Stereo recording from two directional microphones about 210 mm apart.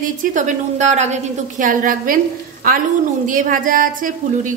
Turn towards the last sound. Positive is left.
turn(degrees=-40)  # may be behind; listen again after turning